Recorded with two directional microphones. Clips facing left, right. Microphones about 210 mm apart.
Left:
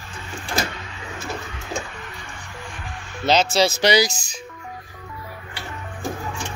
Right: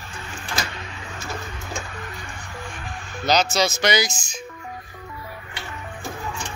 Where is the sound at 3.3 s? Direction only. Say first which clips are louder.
Left 2 dB; 30° left (ahead or behind).